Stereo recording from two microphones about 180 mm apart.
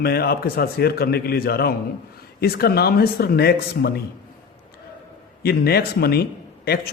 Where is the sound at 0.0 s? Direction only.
60° left (ahead or behind).